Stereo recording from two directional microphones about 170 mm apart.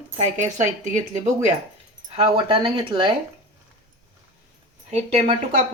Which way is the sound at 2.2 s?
30° right (ahead or behind).